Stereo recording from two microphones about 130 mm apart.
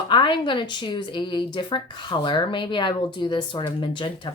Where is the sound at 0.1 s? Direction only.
40° left (ahead or behind).